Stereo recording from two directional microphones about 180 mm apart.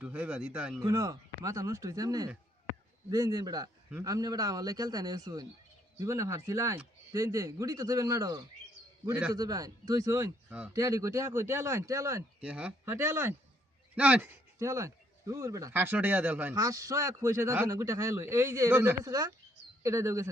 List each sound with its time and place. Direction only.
0.0 s speech: 10° right (ahead or behind)
0.8 s speech: 20° right (ahead or behind)
9.0 s speech: 5° right (ahead or behind)
9.3 s speech: 20° right (ahead or behind)